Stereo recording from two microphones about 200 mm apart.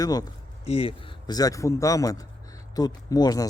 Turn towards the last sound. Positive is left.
turn(degrees=20)  # may be behind; listen again after turning